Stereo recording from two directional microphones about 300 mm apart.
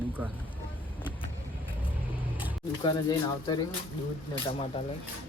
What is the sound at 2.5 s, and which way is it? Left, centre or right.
Speech, centre.